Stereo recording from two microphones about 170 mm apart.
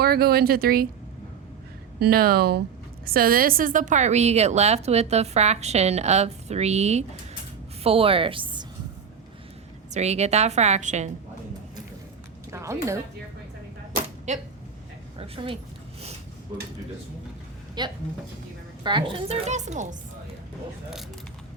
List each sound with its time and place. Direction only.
0.0 s speech: 65° right (ahead or behind)
2.0 s a woman's voice: 65° right (ahead or behind); by 8.6 s 30° right (ahead or behind)
9.9 s a woman's voice: 40° right (ahead or behind)
12.5 s speech: 15° right (ahead or behind)
14.3 s speech: 45° right (ahead or behind)
15.2 s a woman's voice: 30° right (ahead or behind)
17.8 s a woman's voice: 25° right (ahead or behind); by 20.0 s 45° right (ahead or behind)